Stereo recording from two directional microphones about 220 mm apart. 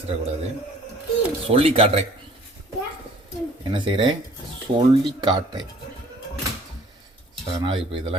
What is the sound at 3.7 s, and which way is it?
Speech, 20° right (ahead or behind).